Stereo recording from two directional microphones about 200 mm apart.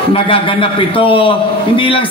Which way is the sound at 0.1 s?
25° left (ahead or behind).